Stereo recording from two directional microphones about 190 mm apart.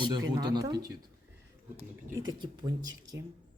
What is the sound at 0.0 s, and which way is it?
Speech, 20° right (ahead or behind).